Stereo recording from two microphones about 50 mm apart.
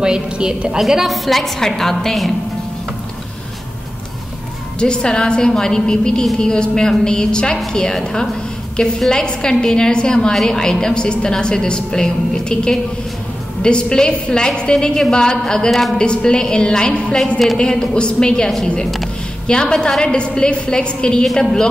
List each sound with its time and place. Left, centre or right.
0.0 s a woman's voice: centre
0.7 s a woman's voice: centre
4.7 s a woman's voice: centre